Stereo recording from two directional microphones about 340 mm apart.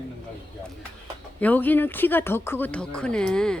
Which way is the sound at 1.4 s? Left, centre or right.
Centre.